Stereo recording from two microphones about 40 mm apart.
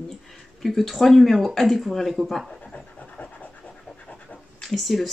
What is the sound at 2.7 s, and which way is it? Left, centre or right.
Pant, left.